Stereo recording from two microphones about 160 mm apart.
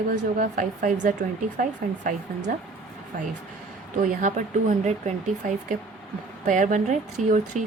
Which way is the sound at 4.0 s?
55° right (ahead or behind).